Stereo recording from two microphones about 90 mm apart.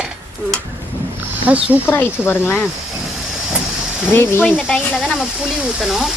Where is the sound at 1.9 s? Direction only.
25° left (ahead or behind).